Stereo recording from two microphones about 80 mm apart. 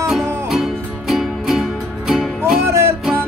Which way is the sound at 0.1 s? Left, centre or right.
Centre.